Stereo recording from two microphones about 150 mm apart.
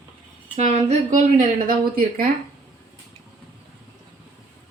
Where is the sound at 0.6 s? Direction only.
50° right (ahead or behind); by 2.3 s 70° right (ahead or behind).